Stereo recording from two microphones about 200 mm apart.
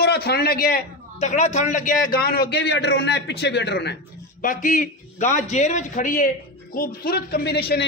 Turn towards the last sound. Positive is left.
turn(degrees=50)  # may be behind; listen again after turning